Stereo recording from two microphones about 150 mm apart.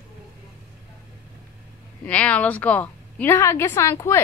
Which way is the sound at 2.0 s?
10° left (ahead or behind).